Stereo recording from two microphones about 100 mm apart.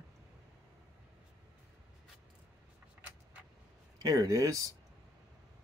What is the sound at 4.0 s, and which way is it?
Speech, 35° right (ahead or behind).